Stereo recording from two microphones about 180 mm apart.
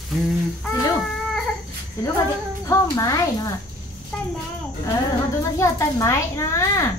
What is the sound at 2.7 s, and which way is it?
Speech, 20° left (ahead or behind).